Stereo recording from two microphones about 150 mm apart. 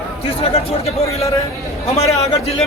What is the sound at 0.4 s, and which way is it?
Speech, 45° left (ahead or behind).